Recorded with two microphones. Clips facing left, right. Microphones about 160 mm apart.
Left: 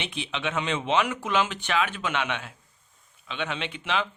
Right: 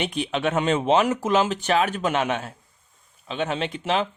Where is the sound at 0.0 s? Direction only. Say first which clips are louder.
Right 7 dB; 45° right (ahead or behind).